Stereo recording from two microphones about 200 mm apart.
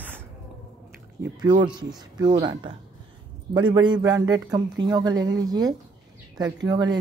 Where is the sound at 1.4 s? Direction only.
20° right (ahead or behind).